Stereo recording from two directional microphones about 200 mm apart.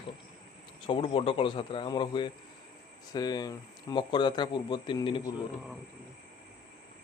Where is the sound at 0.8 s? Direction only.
25° left (ahead or behind).